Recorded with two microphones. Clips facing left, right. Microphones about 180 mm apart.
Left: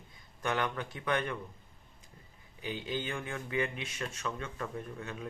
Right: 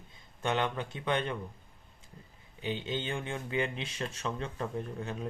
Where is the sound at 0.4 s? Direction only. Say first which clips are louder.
Right 2 dB; 25° right (ahead or behind).